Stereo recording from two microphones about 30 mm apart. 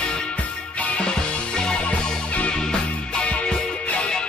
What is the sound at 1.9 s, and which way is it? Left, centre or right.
Music, left.